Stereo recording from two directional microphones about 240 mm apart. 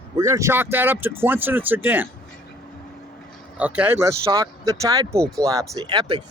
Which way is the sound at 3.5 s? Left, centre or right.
Centre.